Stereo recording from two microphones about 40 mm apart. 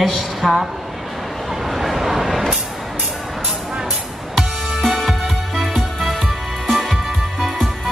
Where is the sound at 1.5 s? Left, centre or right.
Centre.